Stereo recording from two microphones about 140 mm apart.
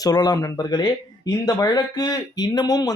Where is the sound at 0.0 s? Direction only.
30° left (ahead or behind).